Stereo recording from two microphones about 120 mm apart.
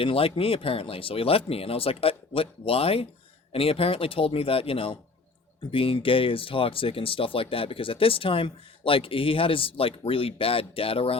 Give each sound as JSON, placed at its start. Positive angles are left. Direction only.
{"t": 0.0, "sound": "speech", "side_deg": 50}